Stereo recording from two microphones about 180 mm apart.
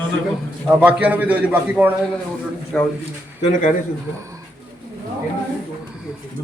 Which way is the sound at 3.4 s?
45° left (ahead or behind).